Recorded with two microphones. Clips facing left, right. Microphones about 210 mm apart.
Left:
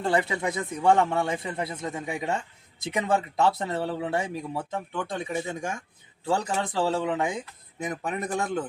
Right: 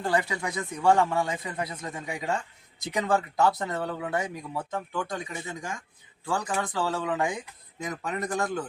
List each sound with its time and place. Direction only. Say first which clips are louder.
0.0 s speech: left 2 dB; 25° left (ahead or behind)